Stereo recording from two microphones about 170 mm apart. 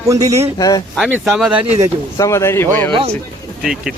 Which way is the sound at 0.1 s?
20° right (ahead or behind).